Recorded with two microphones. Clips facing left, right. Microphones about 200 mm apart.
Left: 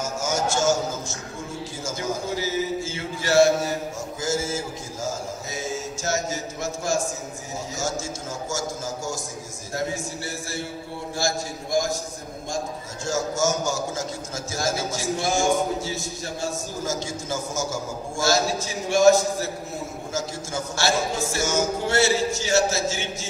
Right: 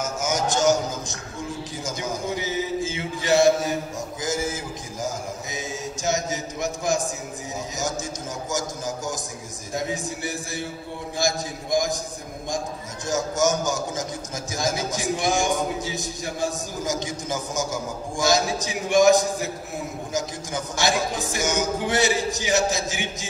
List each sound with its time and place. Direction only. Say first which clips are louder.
0.0 s music: even; 20° right (ahead or behind)
1.9 s a sound: left 1 dB; 20° right (ahead or behind)
4.2 s mantra: left 1 dB; 15° right (ahead or behind)
7.7 s a man's voice: left 1 dB; 20° right (ahead or behind)